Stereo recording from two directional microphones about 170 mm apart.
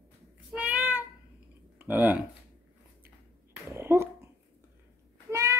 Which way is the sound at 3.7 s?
15° right (ahead or behind).